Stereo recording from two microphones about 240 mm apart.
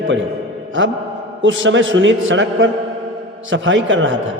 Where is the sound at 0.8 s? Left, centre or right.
Right.